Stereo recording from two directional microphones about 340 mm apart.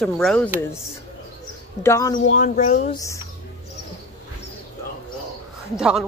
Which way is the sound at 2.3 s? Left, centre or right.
Left.